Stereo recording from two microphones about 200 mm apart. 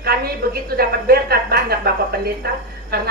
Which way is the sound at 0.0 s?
50° right (ahead or behind).